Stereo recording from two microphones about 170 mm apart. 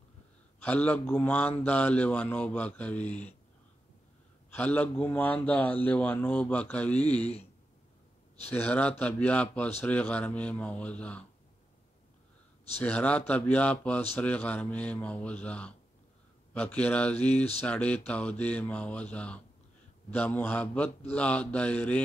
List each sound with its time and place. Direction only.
0.6 s a man's voice: 10° left (ahead or behind)
4.6 s a man's voice: 10° left (ahead or behind)
7.2 s speech: 40° left (ahead or behind)
8.5 s a man's voice: 10° left (ahead or behind)
12.8 s a man's voice: 10° left (ahead or behind)